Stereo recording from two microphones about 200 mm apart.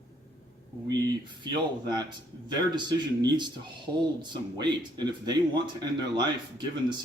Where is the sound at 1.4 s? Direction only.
20° right (ahead or behind).